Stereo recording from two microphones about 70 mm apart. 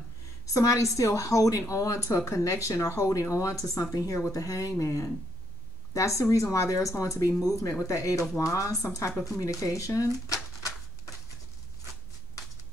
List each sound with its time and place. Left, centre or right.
0.5 s speech: left